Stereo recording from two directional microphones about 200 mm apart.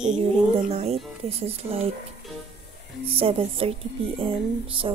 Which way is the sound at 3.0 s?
30° right (ahead or behind).